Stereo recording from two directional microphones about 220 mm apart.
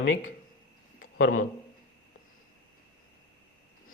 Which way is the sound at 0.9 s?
40° left (ahead or behind).